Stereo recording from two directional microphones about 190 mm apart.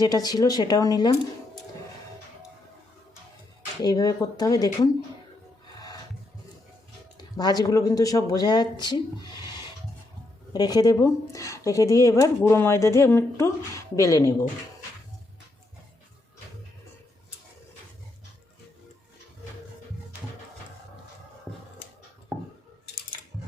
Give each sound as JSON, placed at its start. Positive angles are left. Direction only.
{"t": 0.0, "sound": "speech", "side_deg": 20}
{"t": 3.8, "sound": "speech", "side_deg": 20}
{"t": 7.2, "sound": "speech", "side_deg": 20}